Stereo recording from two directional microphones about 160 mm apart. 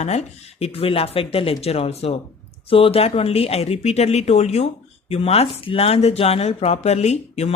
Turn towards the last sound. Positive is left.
turn(degrees=40)  # may be behind; listen again after turning